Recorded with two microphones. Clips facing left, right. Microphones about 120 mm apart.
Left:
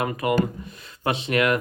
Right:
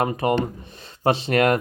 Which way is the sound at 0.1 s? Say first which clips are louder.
Right 1 dB; 30° right (ahead or behind).